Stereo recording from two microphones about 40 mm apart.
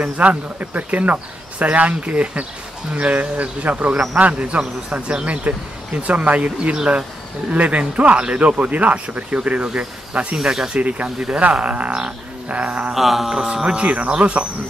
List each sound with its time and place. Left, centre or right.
0.0 s speech: right
10.3 s speech: centre
10.7 s speech: right
11.1 s speech: centre
11.5 s speech: right
12.9 s a sound: centre
13.7 s speech: right